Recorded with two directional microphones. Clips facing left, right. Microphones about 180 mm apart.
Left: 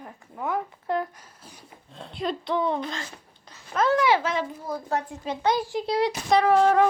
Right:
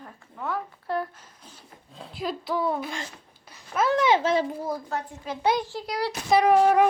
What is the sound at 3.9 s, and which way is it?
Speech, 25° right (ahead or behind).